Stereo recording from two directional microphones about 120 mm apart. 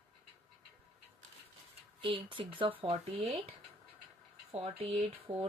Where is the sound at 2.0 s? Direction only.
45° right (ahead or behind).